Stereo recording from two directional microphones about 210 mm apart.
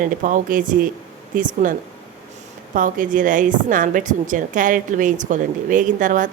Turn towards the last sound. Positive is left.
turn(degrees=-40)  # may be behind; listen again after turning